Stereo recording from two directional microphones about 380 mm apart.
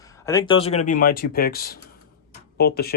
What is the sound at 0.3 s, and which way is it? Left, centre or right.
Speech, centre.